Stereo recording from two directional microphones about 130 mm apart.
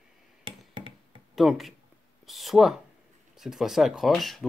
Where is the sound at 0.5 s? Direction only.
45° right (ahead or behind).